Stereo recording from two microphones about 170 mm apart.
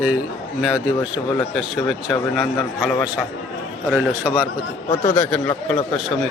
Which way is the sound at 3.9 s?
10° right (ahead or behind).